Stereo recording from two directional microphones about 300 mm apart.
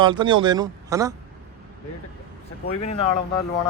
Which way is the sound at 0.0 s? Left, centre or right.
Centre.